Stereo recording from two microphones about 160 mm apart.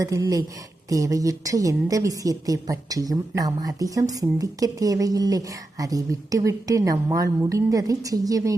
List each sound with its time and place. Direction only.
0.0 s a woman's voice: 20° right (ahead or behind)